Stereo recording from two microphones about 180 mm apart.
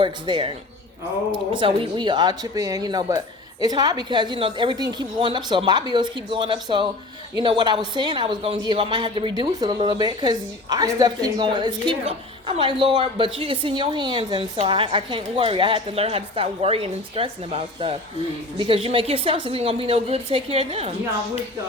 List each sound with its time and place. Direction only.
0.0 s a woman's voice: 25° right (ahead or behind)